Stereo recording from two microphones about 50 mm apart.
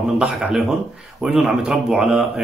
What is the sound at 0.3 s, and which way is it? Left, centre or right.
Speech, centre.